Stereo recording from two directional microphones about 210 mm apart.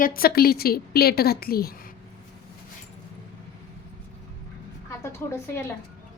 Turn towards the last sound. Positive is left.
turn(degrees=10)  # may be behind; listen again after turning